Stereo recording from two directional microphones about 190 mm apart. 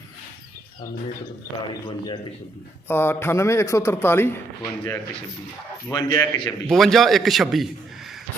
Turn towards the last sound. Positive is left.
turn(degrees=0)  # may be behind; listen again after turning